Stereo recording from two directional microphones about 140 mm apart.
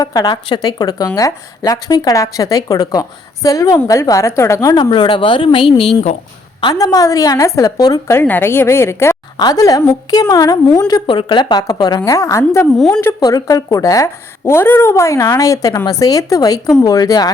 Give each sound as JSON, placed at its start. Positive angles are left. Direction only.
{"t": 0.0, "sound": "a woman's voice", "side_deg": 30}